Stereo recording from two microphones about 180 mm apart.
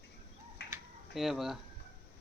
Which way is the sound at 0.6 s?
70° left (ahead or behind).